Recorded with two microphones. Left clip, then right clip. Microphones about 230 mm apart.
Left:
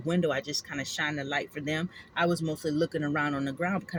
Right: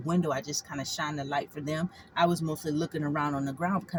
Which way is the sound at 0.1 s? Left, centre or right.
Right.